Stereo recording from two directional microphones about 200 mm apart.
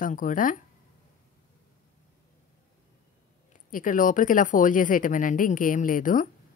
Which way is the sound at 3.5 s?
40° left (ahead or behind).